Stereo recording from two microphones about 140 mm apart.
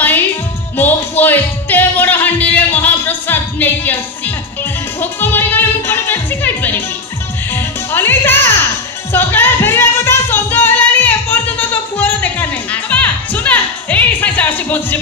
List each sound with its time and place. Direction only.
0.7 s music: 15° left (ahead or behind)
5.2 s music: 15° left (ahead or behind)